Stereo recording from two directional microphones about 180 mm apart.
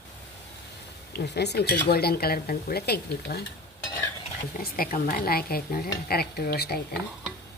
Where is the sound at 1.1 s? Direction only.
65° left (ahead or behind).